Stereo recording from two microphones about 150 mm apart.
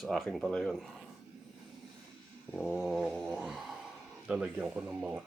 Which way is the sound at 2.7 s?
5° right (ahead or behind).